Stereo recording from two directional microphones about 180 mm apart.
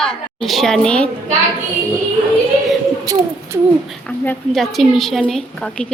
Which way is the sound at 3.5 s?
20° right (ahead or behind).